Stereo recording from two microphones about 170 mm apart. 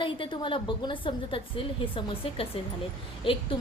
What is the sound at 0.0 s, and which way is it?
A woman's voice, 30° left (ahead or behind).